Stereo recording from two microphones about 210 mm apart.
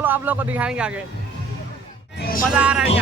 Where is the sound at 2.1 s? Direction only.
45° left (ahead or behind).